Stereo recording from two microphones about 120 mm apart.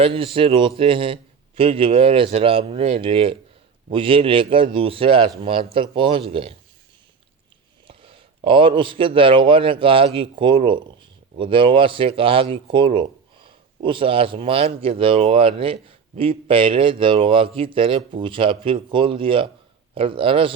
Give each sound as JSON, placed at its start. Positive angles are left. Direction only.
{"t": 0.0, "sound": "a man's voice", "side_deg": -50}
{"t": 7.9, "sound": "a sound", "side_deg": -45}
{"t": 8.4, "sound": "a man's voice", "side_deg": -45}